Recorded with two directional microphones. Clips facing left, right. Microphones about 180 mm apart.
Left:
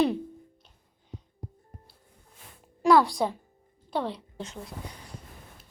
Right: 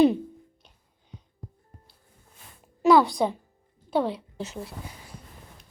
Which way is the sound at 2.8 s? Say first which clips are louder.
Right 2 dB; centre (ahead or behind).